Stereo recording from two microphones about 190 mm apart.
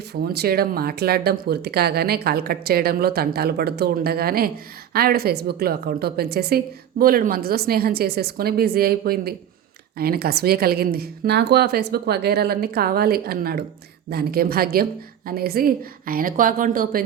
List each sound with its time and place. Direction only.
0.1 s speech: 55° right (ahead or behind)